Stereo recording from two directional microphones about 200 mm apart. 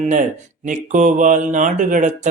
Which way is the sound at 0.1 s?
40° right (ahead or behind).